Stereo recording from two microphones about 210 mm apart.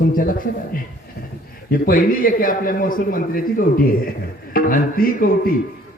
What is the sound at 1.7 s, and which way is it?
A man's voice, 45° left (ahead or behind).